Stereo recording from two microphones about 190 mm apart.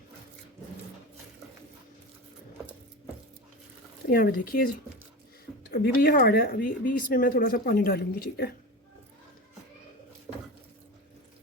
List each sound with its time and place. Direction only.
4.1 s speech: 50° left (ahead or behind)
5.7 s speech: 55° left (ahead or behind)